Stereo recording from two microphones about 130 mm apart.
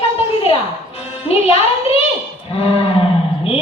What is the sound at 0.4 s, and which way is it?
Music, 50° left (ahead or behind).